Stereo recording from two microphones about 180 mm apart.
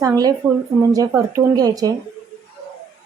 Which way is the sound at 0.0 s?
20° right (ahead or behind).